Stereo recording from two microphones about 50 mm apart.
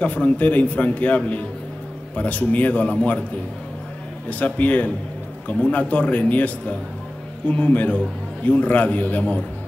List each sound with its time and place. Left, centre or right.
0.0 s a man's voice: left
4.3 s a man's voice: left